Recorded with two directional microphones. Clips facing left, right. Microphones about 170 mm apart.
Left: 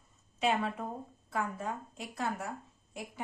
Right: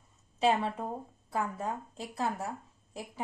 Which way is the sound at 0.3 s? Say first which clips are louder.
Right 3 dB; 35° right (ahead or behind).